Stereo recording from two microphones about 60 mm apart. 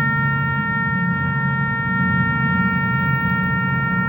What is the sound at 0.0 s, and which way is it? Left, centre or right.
Shofar, left.